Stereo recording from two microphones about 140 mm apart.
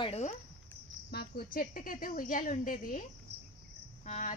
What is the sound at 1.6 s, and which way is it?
Speech, 80° left.